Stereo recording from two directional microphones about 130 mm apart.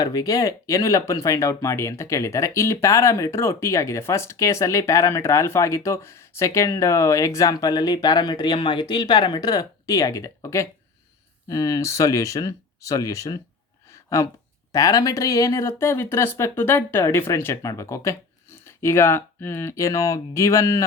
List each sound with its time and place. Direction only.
0.0 s speech: 30° left (ahead or behind)
13.9 s a sound: 20° left (ahead or behind)
14.7 s speech: 25° left (ahead or behind)